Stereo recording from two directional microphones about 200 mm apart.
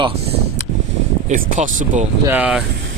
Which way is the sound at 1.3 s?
40° right (ahead or behind).